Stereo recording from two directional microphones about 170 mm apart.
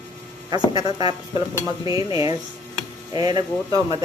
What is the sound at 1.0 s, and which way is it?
Speech, 30° left (ahead or behind).